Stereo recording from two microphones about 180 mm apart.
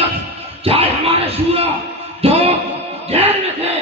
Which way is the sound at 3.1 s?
35° right (ahead or behind).